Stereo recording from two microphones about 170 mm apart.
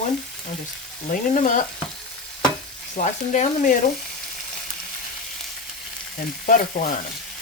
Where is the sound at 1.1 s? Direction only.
50° left (ahead or behind).